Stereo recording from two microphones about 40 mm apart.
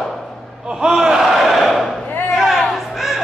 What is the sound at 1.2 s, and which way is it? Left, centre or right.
Crowd, centre.